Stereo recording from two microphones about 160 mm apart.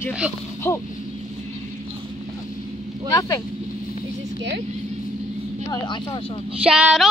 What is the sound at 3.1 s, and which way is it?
Speech, 20° left (ahead or behind).